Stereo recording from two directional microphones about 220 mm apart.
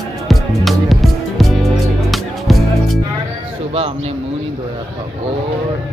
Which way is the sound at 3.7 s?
25° right (ahead or behind).